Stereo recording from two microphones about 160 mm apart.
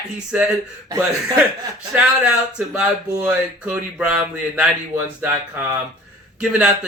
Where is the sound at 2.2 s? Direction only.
5° right (ahead or behind).